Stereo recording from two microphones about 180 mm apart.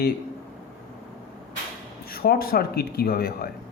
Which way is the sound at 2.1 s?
55° left (ahead or behind).